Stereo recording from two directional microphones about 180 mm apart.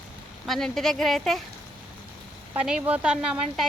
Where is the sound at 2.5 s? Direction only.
5° right (ahead or behind).